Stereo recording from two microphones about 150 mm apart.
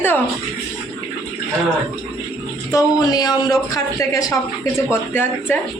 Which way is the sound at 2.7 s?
25° left (ahead or behind).